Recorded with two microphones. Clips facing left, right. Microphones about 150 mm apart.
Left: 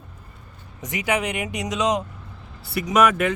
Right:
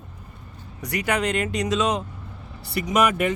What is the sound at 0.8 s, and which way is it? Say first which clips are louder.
Speech: even; 15° left (ahead or behind).